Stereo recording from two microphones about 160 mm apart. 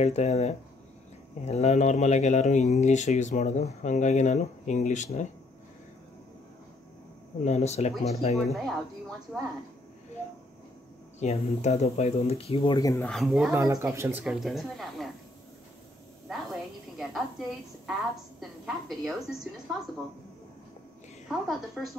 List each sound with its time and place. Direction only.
0.0 s speech: 45° left (ahead or behind)
7.4 s speech: 45° left (ahead or behind)
8.5 s a woman's voice: centre (ahead or behind)
11.1 s speech: 45° left (ahead or behind)
12.7 s speech: 20° left (ahead or behind)
13.0 s a woman's voice: centre (ahead or behind)
13.5 s speech: 20° right (ahead or behind)
14.2 s a woman's voice: centre (ahead or behind)
17.0 s a woman's voice: centre (ahead or behind)
21.3 s a woman's voice: centre (ahead or behind)